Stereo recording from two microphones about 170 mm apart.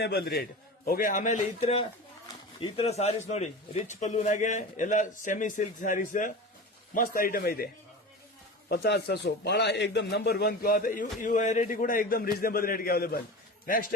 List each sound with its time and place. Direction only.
0.0 s a man's voice: 70° left (ahead or behind)
0.9 s a man's voice: 55° left (ahead or behind)
8.7 s a man's voice: 70° left (ahead or behind)